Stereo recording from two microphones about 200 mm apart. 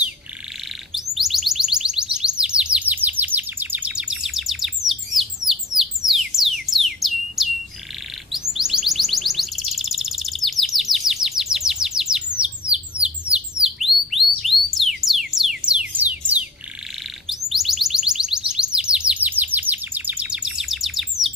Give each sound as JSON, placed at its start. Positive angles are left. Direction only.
{"t": 1.1, "sound": "music", "side_deg": 0}
{"t": 5.8, "sound": "bird", "side_deg": 0}
{"t": 8.3, "sound": "chirp", "side_deg": 0}
{"t": 12.4, "sound": "bird", "side_deg": -5}
{"t": 17.5, "sound": "music", "side_deg": 0}